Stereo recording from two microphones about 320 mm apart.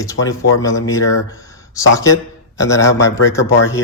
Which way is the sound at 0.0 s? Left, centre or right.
Centre.